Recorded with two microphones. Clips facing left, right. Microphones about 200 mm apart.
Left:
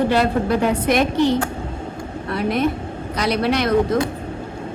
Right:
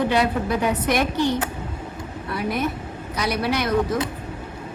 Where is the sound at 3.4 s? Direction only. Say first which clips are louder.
Left 4 dB; 60° left (ahead or behind).